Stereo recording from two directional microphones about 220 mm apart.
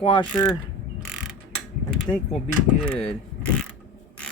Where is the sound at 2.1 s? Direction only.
10° left (ahead or behind).